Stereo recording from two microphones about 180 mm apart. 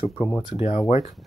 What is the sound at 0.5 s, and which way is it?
Speech, 35° left (ahead or behind).